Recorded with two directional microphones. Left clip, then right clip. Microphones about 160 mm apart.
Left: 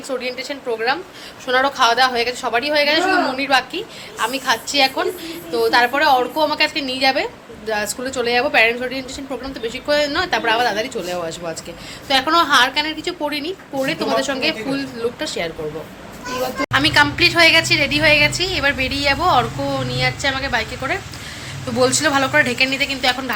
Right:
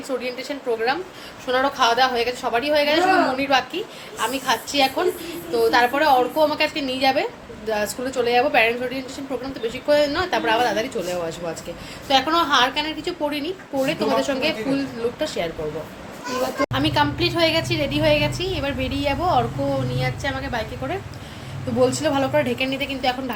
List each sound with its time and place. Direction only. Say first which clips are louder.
0.2 s a woman's voice: left 3 dB; centre (ahead or behind)
16.7 s a woman's voice: left 10 dB; centre (ahead or behind)
19.9 s a woman's voice: left 6 dB; 30° left (ahead or behind)
21.8 s a woman's voice: left 4 dB; centre (ahead or behind)